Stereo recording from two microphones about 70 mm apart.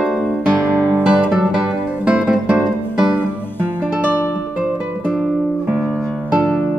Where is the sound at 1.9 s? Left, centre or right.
Centre.